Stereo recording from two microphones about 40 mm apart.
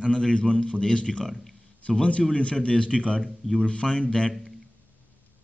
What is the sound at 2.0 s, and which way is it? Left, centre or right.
Speech, left.